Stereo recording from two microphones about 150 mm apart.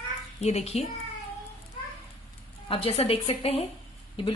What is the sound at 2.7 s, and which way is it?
Speech, 40° left (ahead or behind).